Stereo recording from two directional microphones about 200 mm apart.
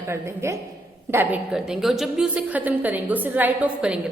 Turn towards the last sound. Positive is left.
turn(degrees=-5)  # may be behind; listen again after turning